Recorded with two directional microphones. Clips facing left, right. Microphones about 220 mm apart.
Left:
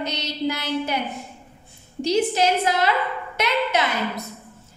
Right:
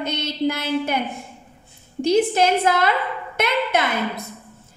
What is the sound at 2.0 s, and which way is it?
A woman's voice, 50° right (ahead or behind).